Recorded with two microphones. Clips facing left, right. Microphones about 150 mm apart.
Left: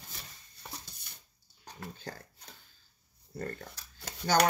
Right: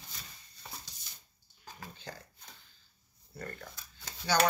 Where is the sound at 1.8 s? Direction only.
45° left (ahead or behind).